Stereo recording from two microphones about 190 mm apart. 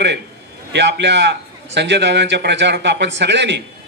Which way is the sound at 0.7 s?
65° right (ahead or behind).